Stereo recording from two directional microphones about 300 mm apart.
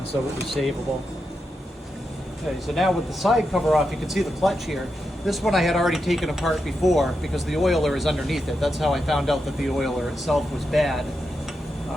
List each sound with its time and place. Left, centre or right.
0.4 s speech: centre
2.7 s speech: centre